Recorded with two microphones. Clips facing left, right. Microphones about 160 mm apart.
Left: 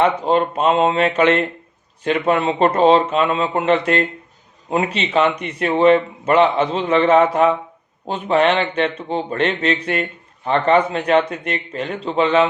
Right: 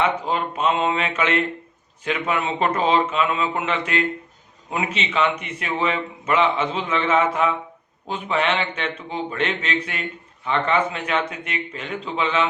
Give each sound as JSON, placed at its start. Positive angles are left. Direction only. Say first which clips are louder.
{"t": 0.0, "sound": "speech", "louder": "left 6 dB", "side_deg": 35}